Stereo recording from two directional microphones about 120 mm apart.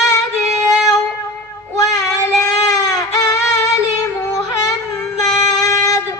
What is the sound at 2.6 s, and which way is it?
Baby cry, 30° left (ahead or behind).